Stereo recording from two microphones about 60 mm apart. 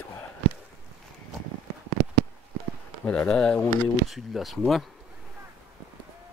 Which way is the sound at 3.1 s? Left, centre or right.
Centre.